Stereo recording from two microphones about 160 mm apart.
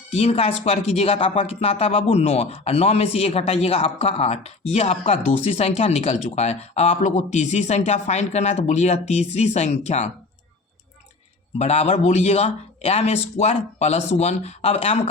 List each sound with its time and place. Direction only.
0.1 s speech: 40° left (ahead or behind)
11.5 s speech: 45° left (ahead or behind)